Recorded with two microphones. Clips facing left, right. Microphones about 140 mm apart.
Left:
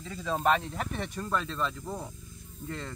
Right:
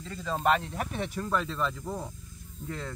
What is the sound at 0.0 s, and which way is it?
Speech, centre (ahead or behind).